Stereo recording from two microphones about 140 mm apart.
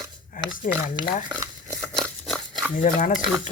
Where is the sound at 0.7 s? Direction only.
70° left (ahead or behind).